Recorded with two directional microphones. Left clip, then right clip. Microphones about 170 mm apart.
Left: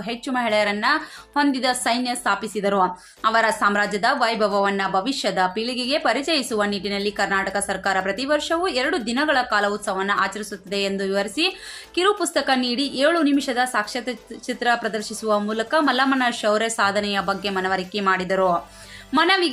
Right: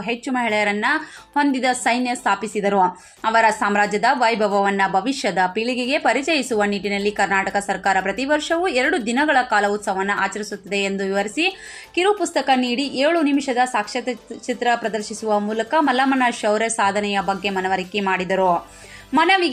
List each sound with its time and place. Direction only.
0.0 s a woman's voice: 15° right (ahead or behind)
12.6 s a woman's voice: 40° right (ahead or behind)
13.0 s a woman's voice: 5° right (ahead or behind)